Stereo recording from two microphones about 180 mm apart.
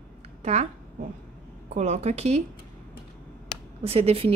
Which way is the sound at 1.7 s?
40° right (ahead or behind).